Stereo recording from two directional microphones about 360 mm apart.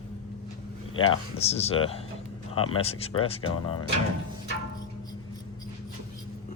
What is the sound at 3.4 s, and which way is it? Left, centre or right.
Speech, left.